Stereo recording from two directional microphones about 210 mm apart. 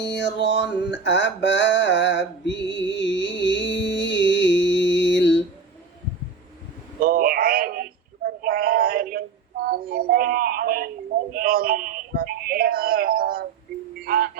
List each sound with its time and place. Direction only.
0.1 s mantra: 60° left (ahead or behind)
7.0 s a sound: 40° right (ahead or behind)
14.0 s music: 45° right (ahead or behind)